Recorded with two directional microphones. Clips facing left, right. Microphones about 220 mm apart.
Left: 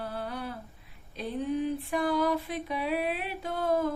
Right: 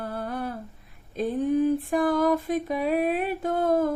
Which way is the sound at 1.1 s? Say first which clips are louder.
Right 7 dB; 45° right (ahead or behind).